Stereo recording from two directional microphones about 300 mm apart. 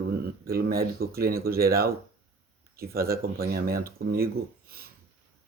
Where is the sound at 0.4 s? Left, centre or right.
Right.